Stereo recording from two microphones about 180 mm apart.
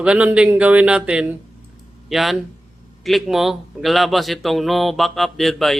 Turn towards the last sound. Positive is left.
turn(degrees=0)  # may be behind; listen again after turning